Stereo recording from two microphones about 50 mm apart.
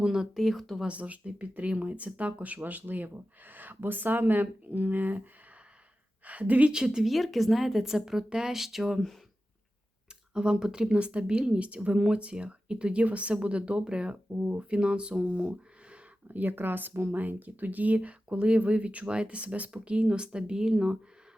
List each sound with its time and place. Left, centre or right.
0.0 s a woman's voice: centre
0.3 s a woman's voice: centre
0.9 s speech: right
6.7 s a woman's voice: centre
7.0 s a woman's voice: centre
10.3 s speech: centre
16.3 s speech: right; by 21.0 s centre